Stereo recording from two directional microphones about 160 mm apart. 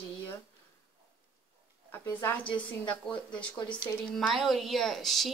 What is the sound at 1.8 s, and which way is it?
Speech, 15° left (ahead or behind).